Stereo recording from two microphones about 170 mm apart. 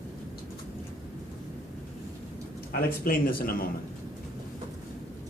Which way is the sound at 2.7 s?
60° left (ahead or behind).